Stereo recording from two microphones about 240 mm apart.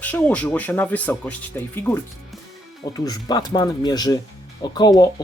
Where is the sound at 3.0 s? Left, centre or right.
Centre.